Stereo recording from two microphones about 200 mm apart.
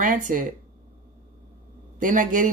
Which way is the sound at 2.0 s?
40° right (ahead or behind).